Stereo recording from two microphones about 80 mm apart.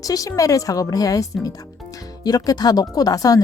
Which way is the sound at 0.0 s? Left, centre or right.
Left.